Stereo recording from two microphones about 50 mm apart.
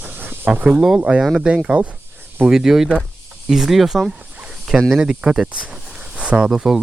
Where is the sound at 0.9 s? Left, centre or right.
Right.